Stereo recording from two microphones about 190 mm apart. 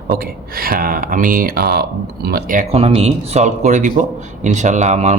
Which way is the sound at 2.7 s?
30° right (ahead or behind).